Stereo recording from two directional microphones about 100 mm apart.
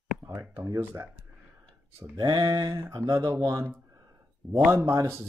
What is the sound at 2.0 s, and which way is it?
Speech, 40° right (ahead or behind).